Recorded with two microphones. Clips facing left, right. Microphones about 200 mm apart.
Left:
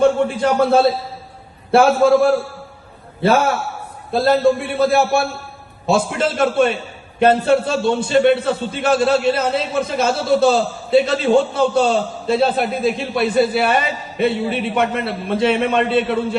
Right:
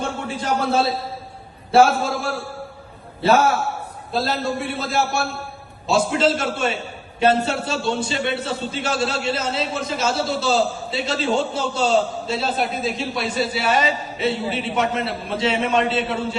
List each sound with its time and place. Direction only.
0.0 s a man's voice: 55° left (ahead or behind)